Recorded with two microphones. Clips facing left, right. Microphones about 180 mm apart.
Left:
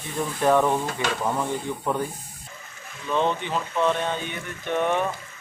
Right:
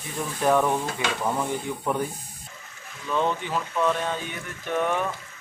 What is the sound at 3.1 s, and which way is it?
Speech, 20° left (ahead or behind).